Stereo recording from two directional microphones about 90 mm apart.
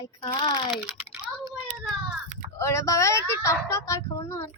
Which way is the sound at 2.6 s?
35° left (ahead or behind).